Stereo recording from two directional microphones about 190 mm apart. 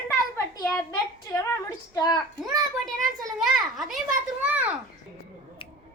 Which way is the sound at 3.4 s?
Centre (ahead or behind).